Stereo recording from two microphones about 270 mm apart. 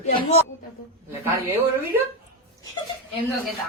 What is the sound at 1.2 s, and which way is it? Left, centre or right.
Speech, centre.